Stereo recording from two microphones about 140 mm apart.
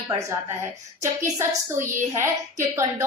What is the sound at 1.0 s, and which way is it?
Speech, 20° right (ahead or behind).